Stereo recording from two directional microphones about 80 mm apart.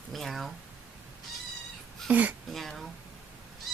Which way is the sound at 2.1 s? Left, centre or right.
Centre.